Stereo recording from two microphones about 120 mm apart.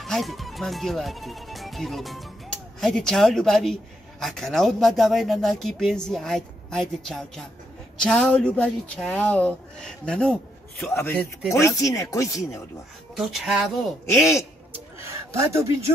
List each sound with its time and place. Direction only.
0.0 s speech: centre (ahead or behind)
11.5 s speech: 25° left (ahead or behind)
13.1 s speech: centre (ahead or behind)
14.7 s a sound: 25° right (ahead or behind)